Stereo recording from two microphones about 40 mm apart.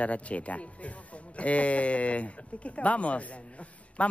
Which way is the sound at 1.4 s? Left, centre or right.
Left.